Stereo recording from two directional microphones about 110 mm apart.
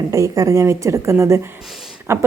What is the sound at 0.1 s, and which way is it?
A woman's voice, 30° right (ahead or behind).